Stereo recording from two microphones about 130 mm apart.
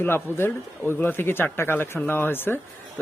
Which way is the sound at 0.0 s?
15° left (ahead or behind).